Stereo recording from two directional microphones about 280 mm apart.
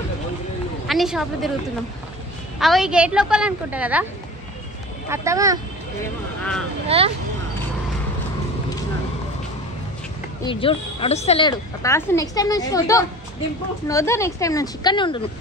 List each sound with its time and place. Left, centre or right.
0.8 s a woman's voice: centre
2.6 s a woman's voice: centre
5.1 s speech: centre
6.9 s speech: right
10.4 s a woman's voice: centre